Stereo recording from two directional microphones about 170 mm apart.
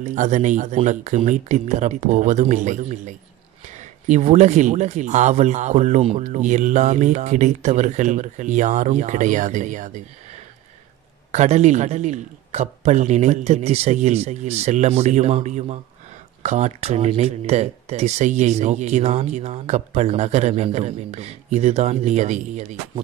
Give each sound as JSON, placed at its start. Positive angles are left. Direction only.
{"t": 0.0, "sound": "speech", "side_deg": -45}